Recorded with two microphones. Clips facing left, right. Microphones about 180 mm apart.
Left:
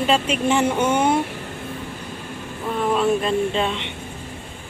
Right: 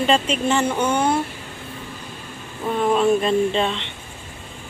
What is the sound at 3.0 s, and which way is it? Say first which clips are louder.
Speech: right 2 dB; centre (ahead or behind).